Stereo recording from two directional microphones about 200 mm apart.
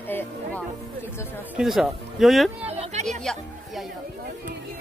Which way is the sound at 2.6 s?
30° right (ahead or behind).